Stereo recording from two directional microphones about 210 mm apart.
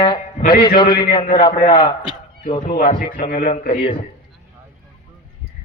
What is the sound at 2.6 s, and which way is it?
Speech, 40° left (ahead or behind).